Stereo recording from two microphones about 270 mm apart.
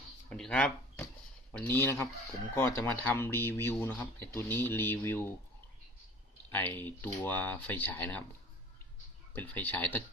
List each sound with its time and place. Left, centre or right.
0.3 s a sound: centre
1.5 s speech: centre
6.5 s speech: centre
9.3 s speech: centre